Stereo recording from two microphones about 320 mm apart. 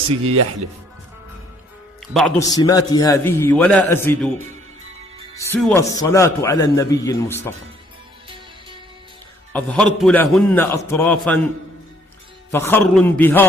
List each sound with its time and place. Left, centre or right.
2.0 s a man's voice: centre
5.3 s a man's voice: centre
9.5 s a man's voice: centre
12.5 s a man's voice: centre